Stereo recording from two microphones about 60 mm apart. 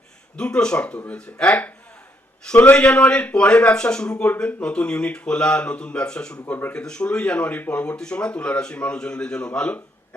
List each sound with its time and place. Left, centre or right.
0.3 s speech: centre
2.7 s a man's voice: centre